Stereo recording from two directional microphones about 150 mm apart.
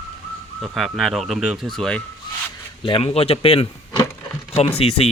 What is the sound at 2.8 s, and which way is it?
Speech, 35° left (ahead or behind).